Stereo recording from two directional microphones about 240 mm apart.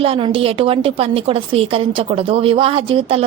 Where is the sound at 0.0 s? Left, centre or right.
Right.